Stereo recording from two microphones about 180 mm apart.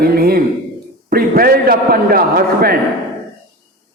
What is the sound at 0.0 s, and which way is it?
A man's voice, 60° right (ahead or behind).